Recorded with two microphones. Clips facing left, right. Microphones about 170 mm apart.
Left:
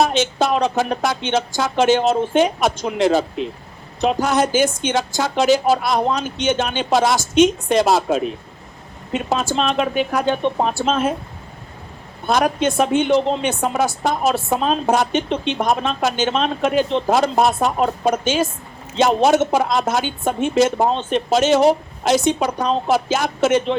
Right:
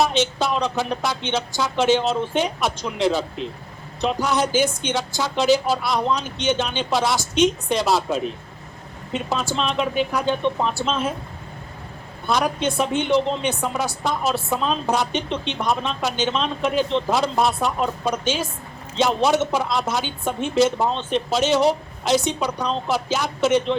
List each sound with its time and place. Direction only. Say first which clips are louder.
0.0 s a woman's voice: left 3 dB; 50° left (ahead or behind)
9.3 s a woman's voice: left 4 dB; 50° left (ahead or behind)
12.6 s a woman's voice: left 5 dB; 50° left (ahead or behind)